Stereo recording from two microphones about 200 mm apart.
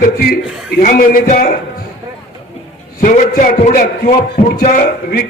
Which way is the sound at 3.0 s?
40° left (ahead or behind).